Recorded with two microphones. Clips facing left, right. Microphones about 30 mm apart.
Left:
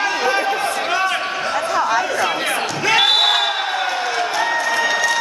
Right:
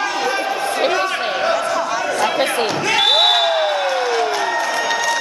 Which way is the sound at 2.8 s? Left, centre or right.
Centre.